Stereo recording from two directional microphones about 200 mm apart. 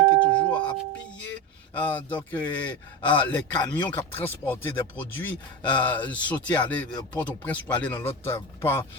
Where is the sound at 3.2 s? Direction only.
20° left (ahead or behind).